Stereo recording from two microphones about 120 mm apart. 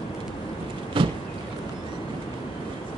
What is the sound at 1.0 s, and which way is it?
Vehicle, 45° right (ahead or behind).